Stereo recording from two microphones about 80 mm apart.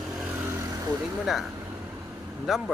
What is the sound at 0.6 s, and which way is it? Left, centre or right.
Vehicle, right.